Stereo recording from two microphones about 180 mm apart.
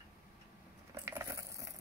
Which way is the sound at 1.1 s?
15° right (ahead or behind).